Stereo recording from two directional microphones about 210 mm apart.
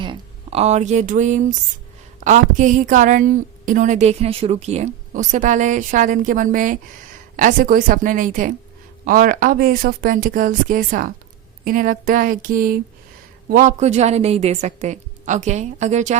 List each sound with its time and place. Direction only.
0.0 s a woman's voice: 25° right (ahead or behind)